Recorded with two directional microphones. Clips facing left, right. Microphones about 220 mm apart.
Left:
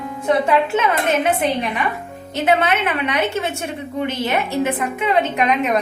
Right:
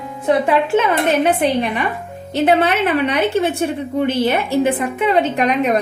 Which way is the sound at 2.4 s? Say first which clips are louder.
Right 3 dB; 35° right (ahead or behind).